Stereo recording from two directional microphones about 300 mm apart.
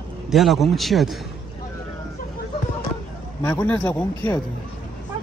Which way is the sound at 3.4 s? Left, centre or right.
Centre.